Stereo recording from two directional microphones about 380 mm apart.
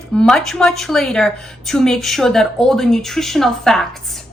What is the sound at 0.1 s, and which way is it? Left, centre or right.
Speech, centre.